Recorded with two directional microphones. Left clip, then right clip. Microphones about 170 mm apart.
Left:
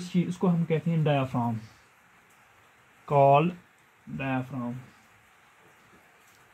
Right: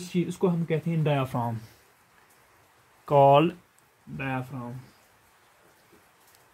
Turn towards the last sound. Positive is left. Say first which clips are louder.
# left 1 dB
turn(degrees=-20)  # may be behind; listen again after turning